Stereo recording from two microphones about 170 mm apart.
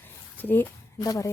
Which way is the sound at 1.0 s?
20° left (ahead or behind).